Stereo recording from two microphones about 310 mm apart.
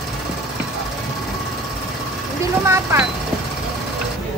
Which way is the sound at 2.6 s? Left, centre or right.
Centre.